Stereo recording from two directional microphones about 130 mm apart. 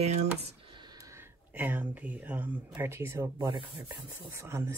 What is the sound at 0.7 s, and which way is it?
Speech, 30° right (ahead or behind).